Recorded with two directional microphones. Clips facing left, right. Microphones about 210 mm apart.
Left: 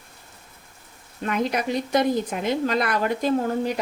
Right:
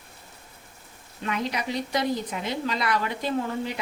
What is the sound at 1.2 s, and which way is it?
A woman's voice, 50° left (ahead or behind).